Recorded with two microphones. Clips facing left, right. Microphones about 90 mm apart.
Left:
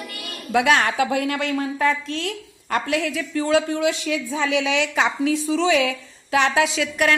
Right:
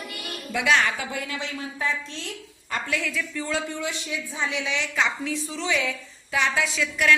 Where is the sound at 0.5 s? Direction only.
55° left (ahead or behind); by 5.9 s 85° left.